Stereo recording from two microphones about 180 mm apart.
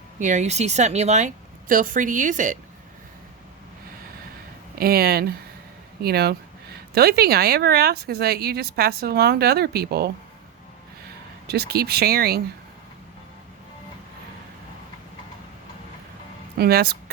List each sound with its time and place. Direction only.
0.2 s a woman's voice: 40° right (ahead or behind)
4.8 s speech: 60° right (ahead or behind)
11.4 s speech: 60° right (ahead or behind)
16.6 s speech: 60° right (ahead or behind)